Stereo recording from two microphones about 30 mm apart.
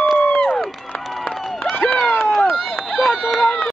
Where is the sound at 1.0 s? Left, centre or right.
Centre.